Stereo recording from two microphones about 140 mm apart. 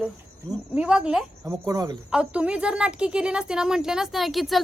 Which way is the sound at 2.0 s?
10° right (ahead or behind).